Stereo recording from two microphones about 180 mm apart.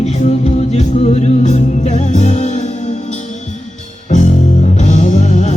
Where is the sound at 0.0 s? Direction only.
40° left (ahead or behind).